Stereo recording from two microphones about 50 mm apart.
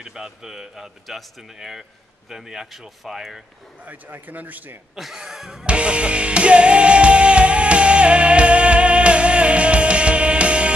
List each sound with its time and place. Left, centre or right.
0.0 s speech: centre
3.8 s a man's voice: right
4.9 s music: centre; by 10.7 s right